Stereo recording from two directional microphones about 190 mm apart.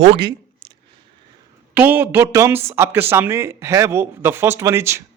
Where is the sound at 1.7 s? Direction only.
10° right (ahead or behind).